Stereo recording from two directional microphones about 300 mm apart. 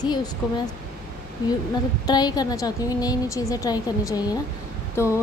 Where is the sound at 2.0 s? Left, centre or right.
Centre.